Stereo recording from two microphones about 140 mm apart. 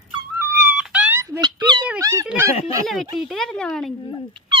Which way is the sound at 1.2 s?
25° right (ahead or behind).